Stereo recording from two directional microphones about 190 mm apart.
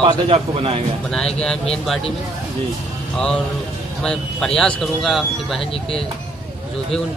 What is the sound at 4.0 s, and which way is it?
Speech, 5° left (ahead or behind).